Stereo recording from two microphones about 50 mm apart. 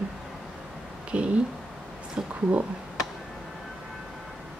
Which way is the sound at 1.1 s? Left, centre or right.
Right.